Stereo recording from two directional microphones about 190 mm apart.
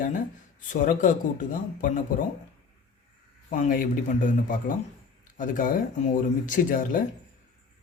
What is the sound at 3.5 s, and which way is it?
Speech, 40° left (ahead or behind).